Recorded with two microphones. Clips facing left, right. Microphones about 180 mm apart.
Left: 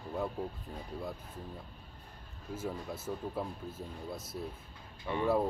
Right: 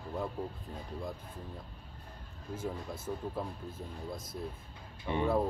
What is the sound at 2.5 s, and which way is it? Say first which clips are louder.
Speech: even; 5° left (ahead or behind).